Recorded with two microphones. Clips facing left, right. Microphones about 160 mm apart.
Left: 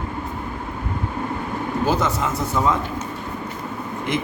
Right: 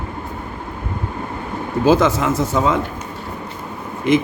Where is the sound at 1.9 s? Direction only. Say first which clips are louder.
Right 9 dB; 90° right.